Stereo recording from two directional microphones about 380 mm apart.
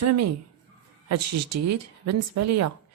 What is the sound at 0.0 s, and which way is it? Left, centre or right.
A woman's voice, right.